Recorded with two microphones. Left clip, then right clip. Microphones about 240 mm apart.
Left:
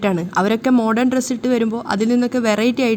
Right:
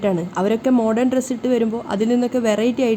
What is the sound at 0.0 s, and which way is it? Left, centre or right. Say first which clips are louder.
A woman's voice: left 2 dB; left.